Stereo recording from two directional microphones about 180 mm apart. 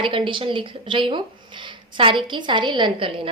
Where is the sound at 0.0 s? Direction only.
25° right (ahead or behind).